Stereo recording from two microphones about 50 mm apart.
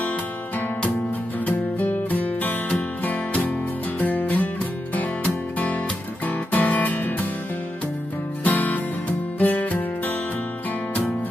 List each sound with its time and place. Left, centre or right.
1.4 s music: left
8.5 s music: left